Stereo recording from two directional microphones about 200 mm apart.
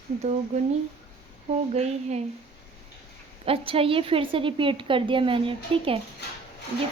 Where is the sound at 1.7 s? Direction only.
35° right (ahead or behind).